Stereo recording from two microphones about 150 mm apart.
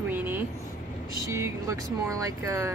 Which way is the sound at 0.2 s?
15° right (ahead or behind).